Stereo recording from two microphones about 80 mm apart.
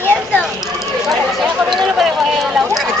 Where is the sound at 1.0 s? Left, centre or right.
Centre.